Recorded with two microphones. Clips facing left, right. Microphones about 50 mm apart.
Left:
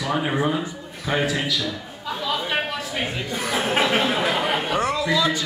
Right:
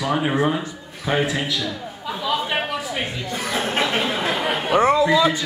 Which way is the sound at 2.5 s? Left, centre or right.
Centre.